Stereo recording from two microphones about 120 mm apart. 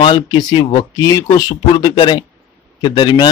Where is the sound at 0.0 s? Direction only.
40° left (ahead or behind).